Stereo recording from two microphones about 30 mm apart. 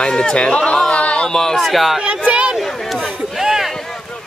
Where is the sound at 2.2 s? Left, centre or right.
Right.